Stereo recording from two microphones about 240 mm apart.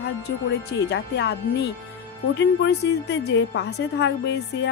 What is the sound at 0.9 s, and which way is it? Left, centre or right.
Speech, left.